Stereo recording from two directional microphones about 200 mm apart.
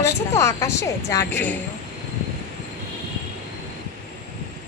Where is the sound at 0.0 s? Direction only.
15° left (ahead or behind).